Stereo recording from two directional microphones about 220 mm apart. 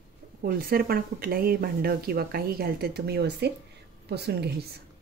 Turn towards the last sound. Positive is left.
turn(degrees=-45)  # may be behind; listen again after turning